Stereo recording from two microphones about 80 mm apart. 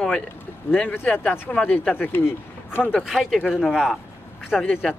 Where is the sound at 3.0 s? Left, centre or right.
Centre.